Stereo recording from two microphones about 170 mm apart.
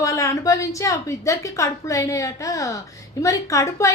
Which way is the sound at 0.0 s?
20° left (ahead or behind).